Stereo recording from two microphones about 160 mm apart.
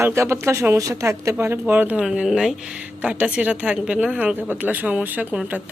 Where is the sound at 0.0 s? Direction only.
15° right (ahead or behind).